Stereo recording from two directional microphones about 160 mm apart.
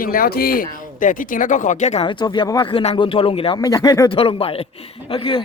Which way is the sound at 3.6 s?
20° left (ahead or behind).